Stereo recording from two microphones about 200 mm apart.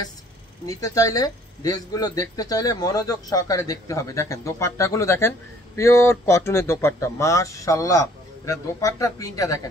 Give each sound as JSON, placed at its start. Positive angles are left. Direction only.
{"t": 0.7, "sound": "a man's voice", "side_deg": 15}